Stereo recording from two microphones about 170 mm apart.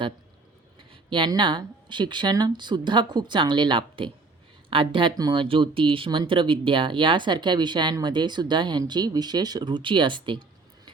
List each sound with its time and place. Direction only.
0.9 s speech: 30° right (ahead or behind)